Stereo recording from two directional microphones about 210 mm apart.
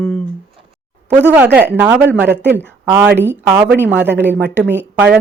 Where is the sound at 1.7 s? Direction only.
10° right (ahead or behind).